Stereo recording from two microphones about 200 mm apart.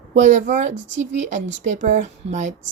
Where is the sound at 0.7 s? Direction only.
65° right (ahead or behind).